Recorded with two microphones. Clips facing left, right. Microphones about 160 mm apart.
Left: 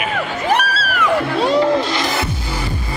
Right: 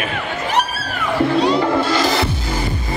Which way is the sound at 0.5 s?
90° left.